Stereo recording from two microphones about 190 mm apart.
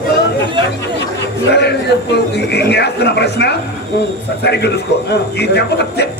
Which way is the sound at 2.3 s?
60° left (ahead or behind).